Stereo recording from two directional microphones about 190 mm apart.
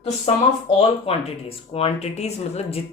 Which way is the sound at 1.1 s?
30° left (ahead or behind).